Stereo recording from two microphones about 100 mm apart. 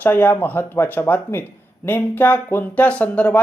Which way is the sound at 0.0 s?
20° left (ahead or behind).